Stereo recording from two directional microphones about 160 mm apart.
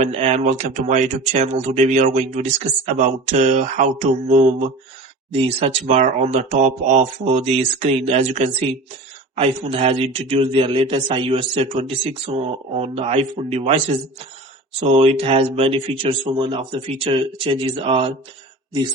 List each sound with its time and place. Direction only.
0.0 s speech: 40° right (ahead or behind)